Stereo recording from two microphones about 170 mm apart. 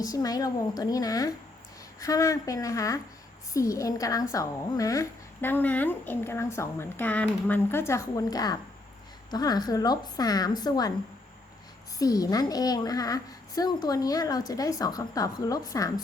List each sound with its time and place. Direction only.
0.0 s a woman's voice: 20° left (ahead or behind)
11.9 s a woman's voice: 20° left (ahead or behind)